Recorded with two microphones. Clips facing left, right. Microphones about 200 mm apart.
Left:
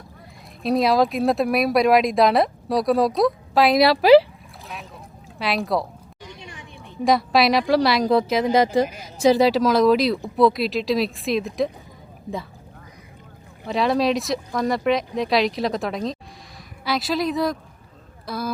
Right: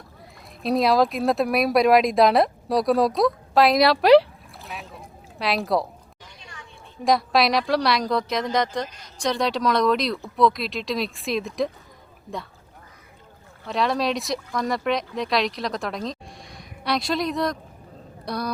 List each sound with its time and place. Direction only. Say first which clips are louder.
0.6 s speech: left 1 dB; centre (ahead or behind)
6.2 s a sound: left 6 dB; 20° left (ahead or behind)
7.0 s speech: left 2 dB; centre (ahead or behind)
13.7 s speech: left 3 dB; centre (ahead or behind)